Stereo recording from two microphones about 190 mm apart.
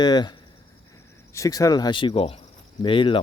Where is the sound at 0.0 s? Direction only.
20° left (ahead or behind).